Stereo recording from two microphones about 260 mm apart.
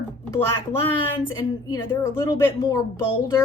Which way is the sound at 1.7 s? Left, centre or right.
Centre.